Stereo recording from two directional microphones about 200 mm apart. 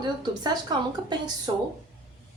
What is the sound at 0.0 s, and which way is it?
Speech, 20° right (ahead or behind).